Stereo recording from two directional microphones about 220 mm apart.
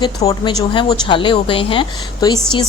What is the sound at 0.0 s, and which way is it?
Speech, 20° left (ahead or behind).